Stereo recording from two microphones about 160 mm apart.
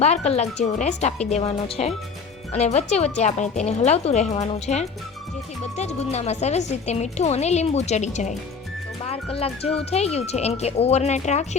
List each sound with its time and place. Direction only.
0.0 s a woman's voice: 45° left (ahead or behind)